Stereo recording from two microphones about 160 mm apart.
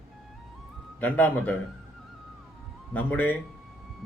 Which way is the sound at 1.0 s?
10° left (ahead or behind).